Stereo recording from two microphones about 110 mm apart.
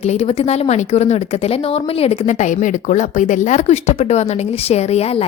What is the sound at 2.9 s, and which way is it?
Speech, 90° left.